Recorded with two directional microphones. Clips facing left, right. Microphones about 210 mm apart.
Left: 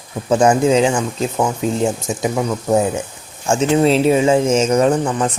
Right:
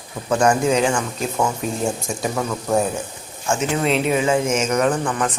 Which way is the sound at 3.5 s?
30° left (ahead or behind).